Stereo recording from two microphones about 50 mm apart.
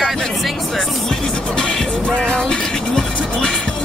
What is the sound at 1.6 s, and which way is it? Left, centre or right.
Music, centre.